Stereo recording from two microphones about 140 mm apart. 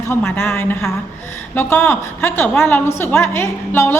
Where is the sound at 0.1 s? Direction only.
15° left (ahead or behind).